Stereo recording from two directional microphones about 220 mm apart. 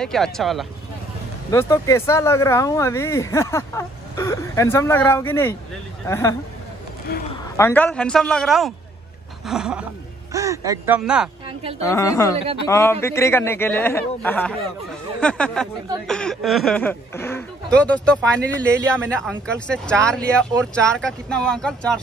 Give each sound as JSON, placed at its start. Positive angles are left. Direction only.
{"t": 0.0, "sound": "speech", "side_deg": 0}
{"t": 1.5, "sound": "a man's voice", "side_deg": 15}
{"t": 7.1, "sound": "speech", "side_deg": 45}
{"t": 7.5, "sound": "speech", "side_deg": 10}
{"t": 10.3, "sound": "a man's voice", "side_deg": -15}
{"t": 11.0, "sound": "speech", "side_deg": -5}
{"t": 11.8, "sound": "a man's voice", "side_deg": 15}